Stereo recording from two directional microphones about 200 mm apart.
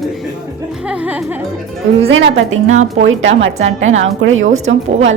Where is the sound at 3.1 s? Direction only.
75° right (ahead or behind).